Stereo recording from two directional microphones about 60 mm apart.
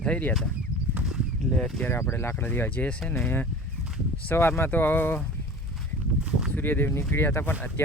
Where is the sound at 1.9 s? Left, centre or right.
Left.